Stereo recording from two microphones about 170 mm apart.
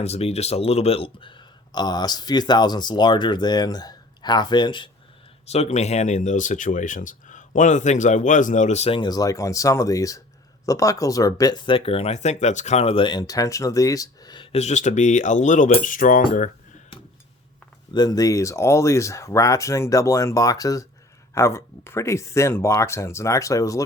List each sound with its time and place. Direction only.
0.0 s speech: 40° left (ahead or behind)
5.5 s speech: 40° left (ahead or behind)
9.0 s speech: 20° left (ahead or behind); by 16.5 s 50° left (ahead or behind)
17.9 s speech: 20° left (ahead or behind)